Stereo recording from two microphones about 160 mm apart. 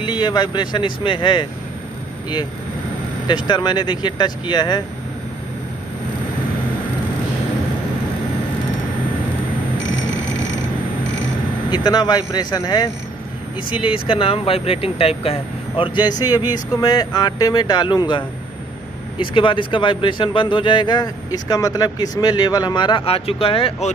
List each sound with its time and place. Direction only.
0.0 s speech: 30° left (ahead or behind)
3.3 s speech: 25° left (ahead or behind)
11.7 s speech: 25° left (ahead or behind)